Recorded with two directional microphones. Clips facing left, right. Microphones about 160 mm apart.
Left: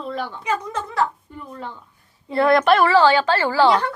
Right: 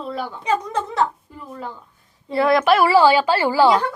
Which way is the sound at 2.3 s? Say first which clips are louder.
Even; centre (ahead or behind).